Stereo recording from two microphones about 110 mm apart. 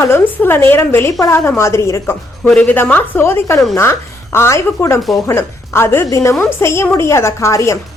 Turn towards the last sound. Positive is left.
turn(degrees=25)  # may be behind; listen again after turning